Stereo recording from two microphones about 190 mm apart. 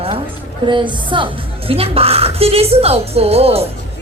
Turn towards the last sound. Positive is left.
turn(degrees=-30)  # may be behind; listen again after turning